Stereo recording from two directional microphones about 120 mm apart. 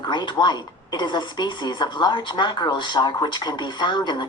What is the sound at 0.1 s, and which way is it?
A woman's voice, 40° left (ahead or behind).